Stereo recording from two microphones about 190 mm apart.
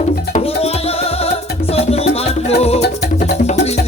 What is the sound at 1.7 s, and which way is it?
Music, 30° left (ahead or behind).